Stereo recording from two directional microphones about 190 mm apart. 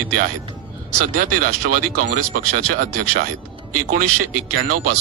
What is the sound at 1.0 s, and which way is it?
Speech, 45° right (ahead or behind).